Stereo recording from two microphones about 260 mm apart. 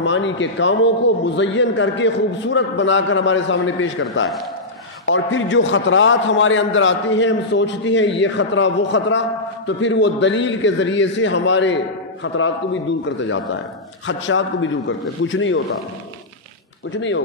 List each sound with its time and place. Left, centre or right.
0.0 s a man's voice: left
16.9 s a man's voice: left